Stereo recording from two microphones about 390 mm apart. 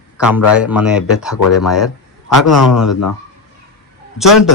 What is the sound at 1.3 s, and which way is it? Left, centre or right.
Speech, left.